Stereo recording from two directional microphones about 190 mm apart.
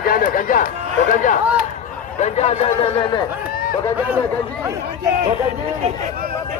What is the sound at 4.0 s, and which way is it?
Speech, 10° right (ahead or behind).